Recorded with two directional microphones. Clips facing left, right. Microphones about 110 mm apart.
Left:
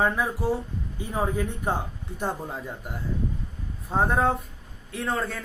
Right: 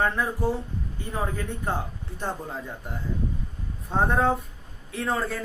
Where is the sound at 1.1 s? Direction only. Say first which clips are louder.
Left 3 dB; 15° left (ahead or behind).